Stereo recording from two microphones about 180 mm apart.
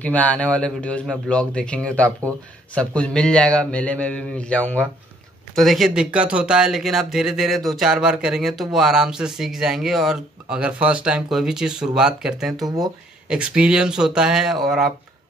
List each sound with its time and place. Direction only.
0.0 s speech: 10° left (ahead or behind)
12.6 s speech: 20° right (ahead or behind)
13.3 s speech: 5° right (ahead or behind)